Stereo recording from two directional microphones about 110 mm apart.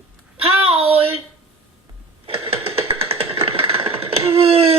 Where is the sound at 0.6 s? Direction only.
60° right (ahead or behind).